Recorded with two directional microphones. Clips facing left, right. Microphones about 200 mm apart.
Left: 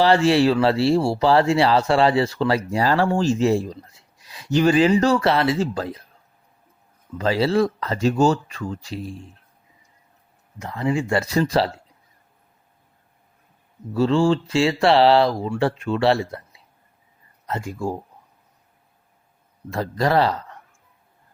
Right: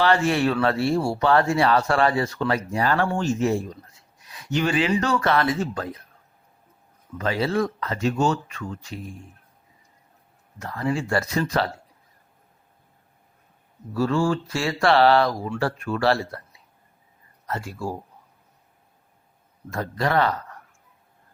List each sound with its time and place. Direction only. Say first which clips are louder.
0.0 s speech: left 4 dB; 30° left (ahead or behind)
7.2 s speech: left 4 dB; 30° left (ahead or behind)
10.6 s speech: left 3 dB; 20° left (ahead or behind)
11.3 s speech: left 6 dB; 35° left (ahead or behind)
13.9 s speech: left 4 dB; 25° left (ahead or behind)
17.4 s speech: left 3 dB; 20° left (ahead or behind)
19.7 s speech: left 3 dB; 35° left (ahead or behind)